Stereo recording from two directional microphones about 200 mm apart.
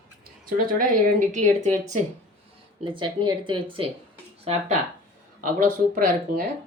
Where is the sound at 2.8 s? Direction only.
25° right (ahead or behind); by 6.5 s 40° right (ahead or behind).